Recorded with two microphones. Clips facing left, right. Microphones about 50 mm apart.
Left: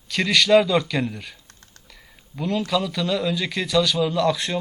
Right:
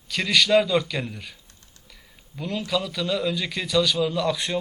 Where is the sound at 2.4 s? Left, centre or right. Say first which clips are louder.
Left 4 dB; centre.